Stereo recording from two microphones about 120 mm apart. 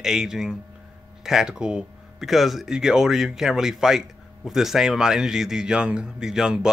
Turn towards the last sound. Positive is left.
turn(degrees=-5)  # may be behind; listen again after turning